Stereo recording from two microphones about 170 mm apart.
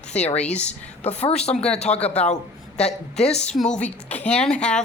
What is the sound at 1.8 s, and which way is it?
Speech, 40° left (ahead or behind).